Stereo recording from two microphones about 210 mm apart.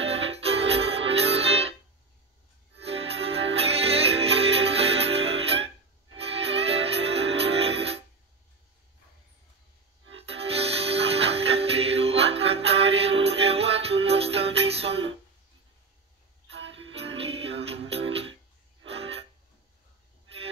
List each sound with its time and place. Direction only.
0.0 s music: 30° right (ahead or behind)
2.8 s music: 30° right (ahead or behind)
10.1 s music: 30° right (ahead or behind)
16.4 s music: 60° right (ahead or behind)
16.7 s music: 25° right (ahead or behind)